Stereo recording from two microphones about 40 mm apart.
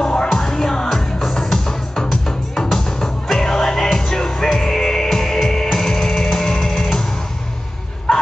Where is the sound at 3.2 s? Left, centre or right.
Centre.